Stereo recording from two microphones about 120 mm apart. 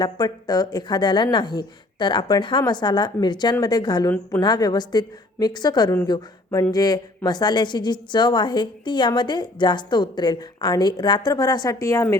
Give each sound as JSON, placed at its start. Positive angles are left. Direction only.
{"t": 0.0, "sound": "a woman's voice", "side_deg": 35}